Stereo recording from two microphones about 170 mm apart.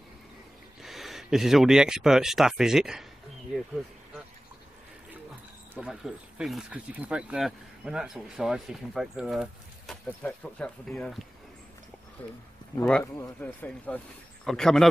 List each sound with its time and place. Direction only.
0.8 s speech: centre (ahead or behind)
5.8 s speech: 5° right (ahead or behind)
12.7 s speech: 5° left (ahead or behind)